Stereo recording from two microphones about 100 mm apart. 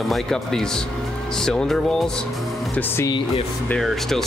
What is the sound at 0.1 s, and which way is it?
Speech, 5° left (ahead or behind).